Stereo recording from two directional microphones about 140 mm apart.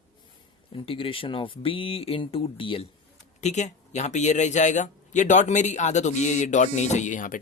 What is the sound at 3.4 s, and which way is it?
A man's voice, 55° left (ahead or behind).